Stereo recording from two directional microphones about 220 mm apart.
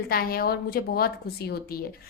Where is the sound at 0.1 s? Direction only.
45° left (ahead or behind).